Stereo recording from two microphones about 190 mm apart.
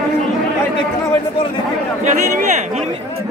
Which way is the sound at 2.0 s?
40° right (ahead or behind).